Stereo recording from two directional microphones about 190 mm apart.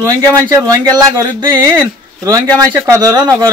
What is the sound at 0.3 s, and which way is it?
Speech, 20° right (ahead or behind).